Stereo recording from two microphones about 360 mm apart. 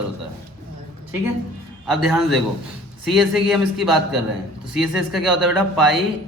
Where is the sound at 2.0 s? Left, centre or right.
Centre.